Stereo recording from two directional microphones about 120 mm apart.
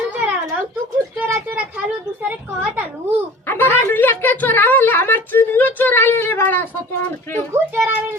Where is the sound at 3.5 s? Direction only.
15° left (ahead or behind).